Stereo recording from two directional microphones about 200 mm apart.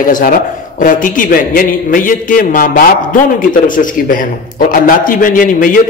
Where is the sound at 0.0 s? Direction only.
45° left (ahead or behind).